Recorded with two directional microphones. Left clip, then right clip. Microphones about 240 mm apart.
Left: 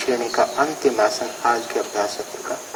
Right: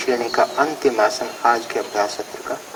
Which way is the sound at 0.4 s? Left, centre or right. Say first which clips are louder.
Right 1 dB; centre.